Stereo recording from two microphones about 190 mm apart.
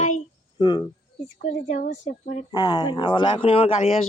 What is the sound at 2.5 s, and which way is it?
Speech, 20° left (ahead or behind).